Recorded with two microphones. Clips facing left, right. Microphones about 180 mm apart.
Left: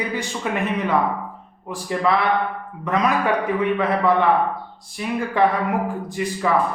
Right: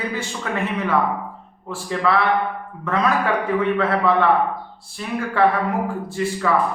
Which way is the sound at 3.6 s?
15° left (ahead or behind).